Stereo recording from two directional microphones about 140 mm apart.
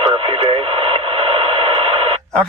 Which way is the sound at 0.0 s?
45° right (ahead or behind).